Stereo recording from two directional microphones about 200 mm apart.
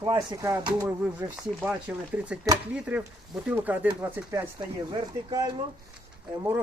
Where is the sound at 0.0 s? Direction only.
15° right (ahead or behind).